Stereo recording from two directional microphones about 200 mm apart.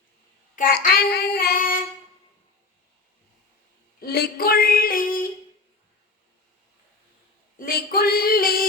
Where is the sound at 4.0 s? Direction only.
50° left (ahead or behind).